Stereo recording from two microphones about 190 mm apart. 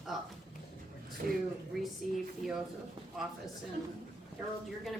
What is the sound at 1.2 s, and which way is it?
Speech, 45° right (ahead or behind).